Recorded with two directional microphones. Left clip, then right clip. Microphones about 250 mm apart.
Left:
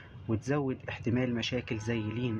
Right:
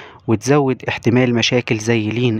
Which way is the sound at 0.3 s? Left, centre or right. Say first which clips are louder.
Right 17 dB; right.